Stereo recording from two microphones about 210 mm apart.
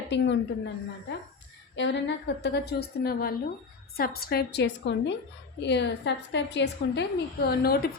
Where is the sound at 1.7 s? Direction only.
60° left (ahead or behind).